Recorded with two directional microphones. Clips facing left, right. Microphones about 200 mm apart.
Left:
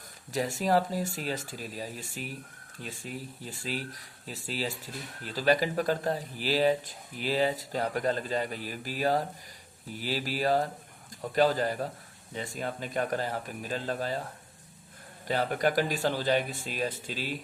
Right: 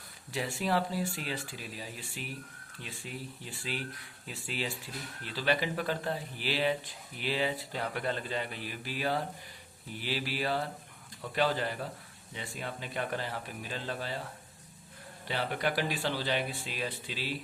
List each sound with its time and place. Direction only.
0.3 s speech: 40° left (ahead or behind)
15.3 s speech: 45° left (ahead or behind)